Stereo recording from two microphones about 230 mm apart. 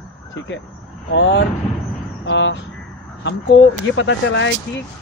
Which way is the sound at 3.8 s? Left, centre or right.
Left.